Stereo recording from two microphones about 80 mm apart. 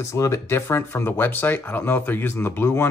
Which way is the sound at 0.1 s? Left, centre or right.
Left.